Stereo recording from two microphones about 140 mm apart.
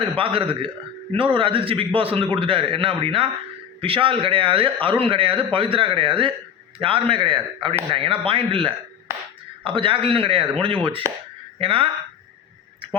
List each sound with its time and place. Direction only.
0.0 s a man's voice: 40° right (ahead or behind)